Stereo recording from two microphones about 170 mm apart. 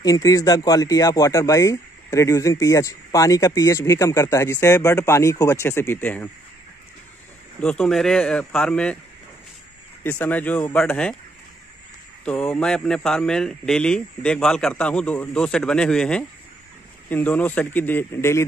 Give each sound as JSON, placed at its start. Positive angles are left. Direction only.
{"t": 0.0, "sound": "speech", "side_deg": 20}
{"t": 7.6, "sound": "speech", "side_deg": 5}
{"t": 10.0, "sound": "speech", "side_deg": 10}
{"t": 12.3, "sound": "speech", "side_deg": 5}